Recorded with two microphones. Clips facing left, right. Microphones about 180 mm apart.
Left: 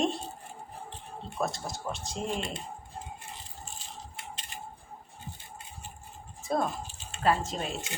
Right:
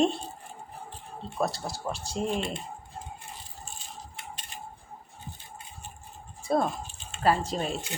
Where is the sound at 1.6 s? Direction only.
35° right (ahead or behind).